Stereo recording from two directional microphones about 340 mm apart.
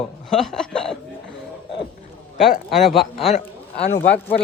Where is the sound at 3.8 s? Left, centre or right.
Left.